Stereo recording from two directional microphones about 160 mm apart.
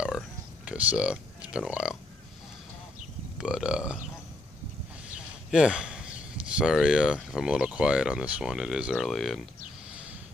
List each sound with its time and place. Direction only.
0.7 s speech: 10° right (ahead or behind)
3.3 s speech: 5° right (ahead or behind)
5.0 s speech: 5° right (ahead or behind)